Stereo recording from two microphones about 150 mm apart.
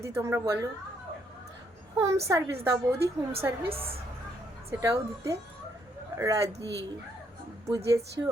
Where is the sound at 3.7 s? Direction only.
40° right (ahead or behind).